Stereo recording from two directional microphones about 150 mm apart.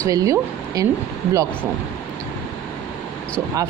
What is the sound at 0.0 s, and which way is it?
Speech, 20° right (ahead or behind).